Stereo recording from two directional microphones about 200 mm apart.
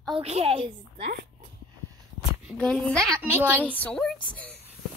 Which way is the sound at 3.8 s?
5° left (ahead or behind).